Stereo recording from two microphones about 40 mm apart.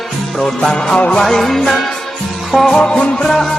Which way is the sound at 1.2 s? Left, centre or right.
Centre.